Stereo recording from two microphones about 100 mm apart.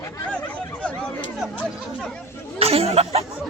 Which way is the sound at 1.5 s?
10° left (ahead or behind).